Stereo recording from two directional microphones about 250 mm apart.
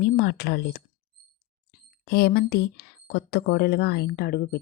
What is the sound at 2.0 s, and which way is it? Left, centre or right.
Speech, left.